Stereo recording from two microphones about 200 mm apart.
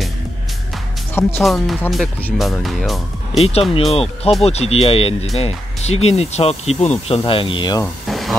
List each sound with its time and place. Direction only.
1.4 s speech: centre (ahead or behind)
3.3 s speech: 30° left (ahead or behind)
7.8 s a sound: centre (ahead or behind)